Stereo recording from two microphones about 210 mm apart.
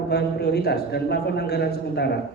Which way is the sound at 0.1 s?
50° left (ahead or behind).